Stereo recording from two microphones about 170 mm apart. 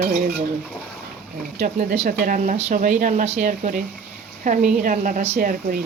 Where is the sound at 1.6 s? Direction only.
45° right (ahead or behind).